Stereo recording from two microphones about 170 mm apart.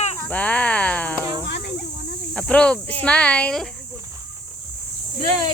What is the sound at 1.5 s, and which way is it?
Cricket, 90° left.